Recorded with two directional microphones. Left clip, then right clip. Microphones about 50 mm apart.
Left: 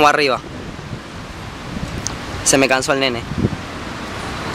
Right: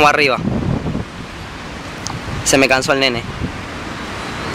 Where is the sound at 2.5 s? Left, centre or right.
Centre.